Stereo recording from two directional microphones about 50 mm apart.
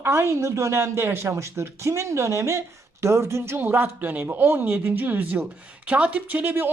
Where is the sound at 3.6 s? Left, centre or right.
Right.